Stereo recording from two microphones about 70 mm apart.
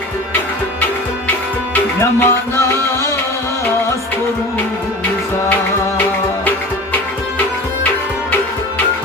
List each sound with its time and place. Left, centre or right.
2.0 s music: left